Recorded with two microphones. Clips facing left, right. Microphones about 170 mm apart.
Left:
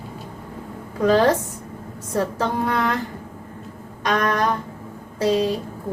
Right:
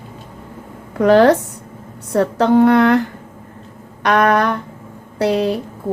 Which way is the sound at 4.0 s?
70° right (ahead or behind).